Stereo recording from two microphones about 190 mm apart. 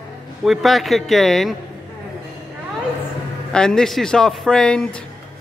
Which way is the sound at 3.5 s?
5° left (ahead or behind).